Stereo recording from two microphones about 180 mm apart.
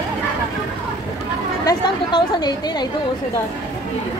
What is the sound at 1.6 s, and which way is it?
Speech, 20° left (ahead or behind).